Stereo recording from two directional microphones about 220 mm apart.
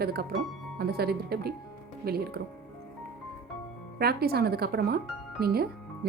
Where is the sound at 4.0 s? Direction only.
45° right (ahead or behind).